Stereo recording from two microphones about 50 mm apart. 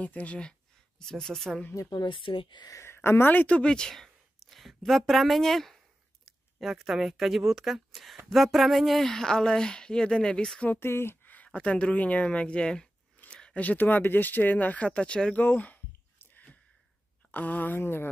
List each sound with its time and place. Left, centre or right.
0.0 s speech: left; by 1.6 s centre
2.7 s speech: left
3.3 s speech: left
3.9 s speech: centre
6.2 s speech: centre
10.7 s speech: left
11.2 s a sound: left
11.5 s speech: left
13.3 s a sound: centre
13.6 s speech: left; by 15.3 s centre
15.4 s speech: left
17.3 s speech: left
17.7 s speech: left